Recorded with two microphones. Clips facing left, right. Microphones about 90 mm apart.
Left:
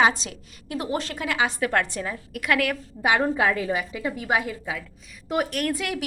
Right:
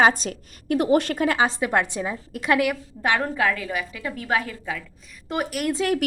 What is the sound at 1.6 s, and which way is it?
A woman's voice, 20° right (ahead or behind).